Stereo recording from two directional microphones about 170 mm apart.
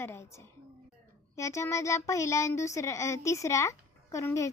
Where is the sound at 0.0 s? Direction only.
15° left (ahead or behind).